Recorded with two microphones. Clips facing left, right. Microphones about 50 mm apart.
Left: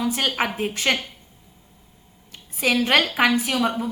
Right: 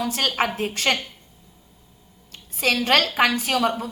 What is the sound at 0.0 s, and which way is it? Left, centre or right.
A woman's voice, centre.